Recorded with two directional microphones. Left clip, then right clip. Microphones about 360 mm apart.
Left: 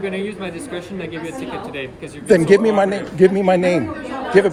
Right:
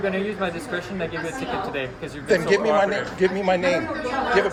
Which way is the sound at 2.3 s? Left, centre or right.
Centre.